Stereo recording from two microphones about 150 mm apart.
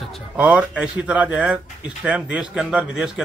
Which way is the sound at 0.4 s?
10° right (ahead or behind).